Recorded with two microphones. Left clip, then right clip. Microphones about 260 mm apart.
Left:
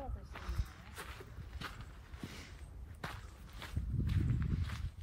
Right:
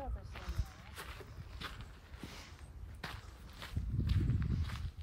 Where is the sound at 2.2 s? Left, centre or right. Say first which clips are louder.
Left 1 dB; right.